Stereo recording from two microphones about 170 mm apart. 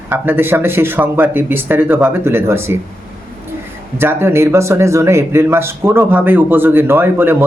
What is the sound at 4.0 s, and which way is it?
Speech, 15° right (ahead or behind).